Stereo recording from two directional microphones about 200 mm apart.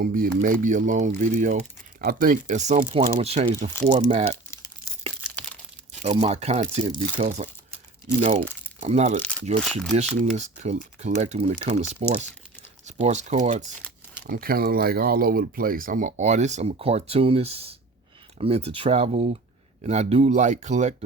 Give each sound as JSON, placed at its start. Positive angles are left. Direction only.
{"t": 0.0, "sound": "speech", "side_deg": -45}
{"t": 6.0, "sound": "speech", "side_deg": -35}
{"t": 14.3, "sound": "speech", "side_deg": -45}